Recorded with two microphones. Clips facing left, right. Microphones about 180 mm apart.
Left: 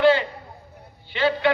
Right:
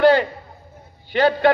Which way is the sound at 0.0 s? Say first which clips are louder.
Right 3 dB; 45° right (ahead or behind).